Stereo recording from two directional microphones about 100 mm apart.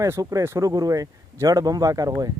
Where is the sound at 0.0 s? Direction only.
35° right (ahead or behind).